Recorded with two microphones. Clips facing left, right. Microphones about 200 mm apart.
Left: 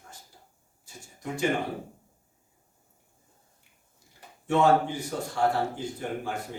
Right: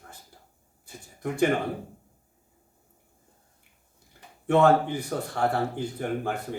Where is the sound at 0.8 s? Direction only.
60° right (ahead or behind).